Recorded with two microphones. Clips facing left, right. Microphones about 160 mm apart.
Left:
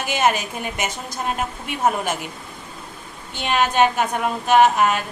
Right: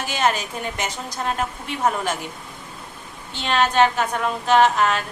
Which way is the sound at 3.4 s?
15° left (ahead or behind).